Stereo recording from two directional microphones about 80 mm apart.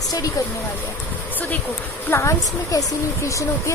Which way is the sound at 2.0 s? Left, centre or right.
Left.